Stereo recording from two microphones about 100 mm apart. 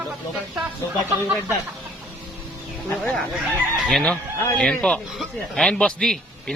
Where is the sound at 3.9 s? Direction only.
10° left (ahead or behind).